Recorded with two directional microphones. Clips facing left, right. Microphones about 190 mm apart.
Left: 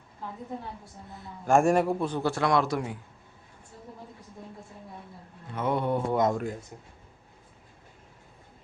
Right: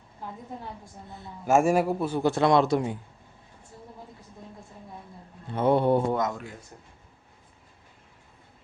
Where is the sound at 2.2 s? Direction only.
25° right (ahead or behind).